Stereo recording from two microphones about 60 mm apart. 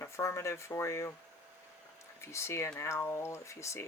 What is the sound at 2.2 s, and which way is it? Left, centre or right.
Speech, left.